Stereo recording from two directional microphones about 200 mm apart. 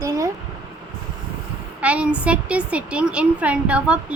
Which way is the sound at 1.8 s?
5° right (ahead or behind).